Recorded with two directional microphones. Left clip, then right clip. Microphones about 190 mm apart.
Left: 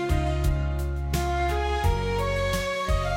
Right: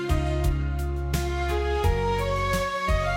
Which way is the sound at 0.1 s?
Centre (ahead or behind).